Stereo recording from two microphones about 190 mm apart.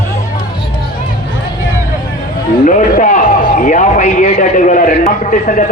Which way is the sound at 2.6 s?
45° left (ahead or behind).